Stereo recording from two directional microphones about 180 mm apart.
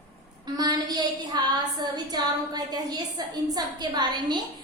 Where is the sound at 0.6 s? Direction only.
25° right (ahead or behind).